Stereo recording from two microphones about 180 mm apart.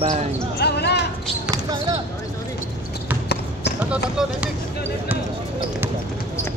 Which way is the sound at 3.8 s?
5° right (ahead or behind).